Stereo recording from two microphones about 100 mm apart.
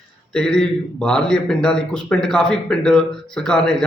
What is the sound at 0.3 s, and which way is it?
A man's voice, 5° left (ahead or behind).